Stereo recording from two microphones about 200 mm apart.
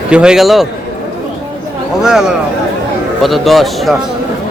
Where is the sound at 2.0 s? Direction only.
5° right (ahead or behind).